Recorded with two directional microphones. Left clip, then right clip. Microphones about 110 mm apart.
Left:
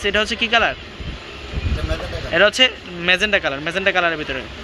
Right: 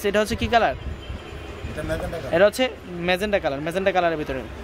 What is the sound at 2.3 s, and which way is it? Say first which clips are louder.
Speech: left 4 dB; 25° right (ahead or behind).